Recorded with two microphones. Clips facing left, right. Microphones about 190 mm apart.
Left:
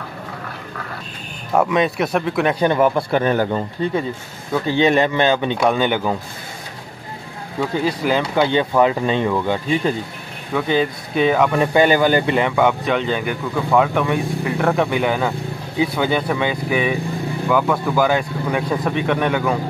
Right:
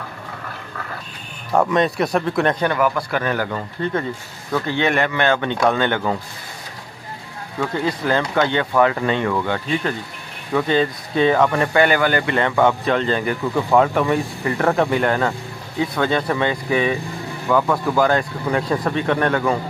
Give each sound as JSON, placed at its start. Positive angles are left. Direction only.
{"t": 1.5, "sound": "speech", "side_deg": 5}
{"t": 2.6, "sound": "speech", "side_deg": 25}
{"t": 4.5, "sound": "speech", "side_deg": 15}
{"t": 7.6, "sound": "speech", "side_deg": 10}
{"t": 11.7, "sound": "speech", "side_deg": 20}
{"t": 12.4, "sound": "speech", "side_deg": 5}